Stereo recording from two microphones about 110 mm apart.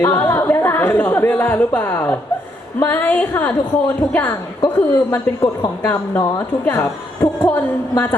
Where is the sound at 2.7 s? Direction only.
15° left (ahead or behind).